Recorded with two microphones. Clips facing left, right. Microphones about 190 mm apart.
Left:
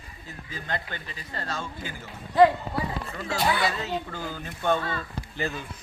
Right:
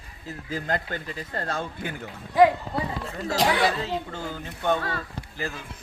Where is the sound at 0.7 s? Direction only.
45° right (ahead or behind).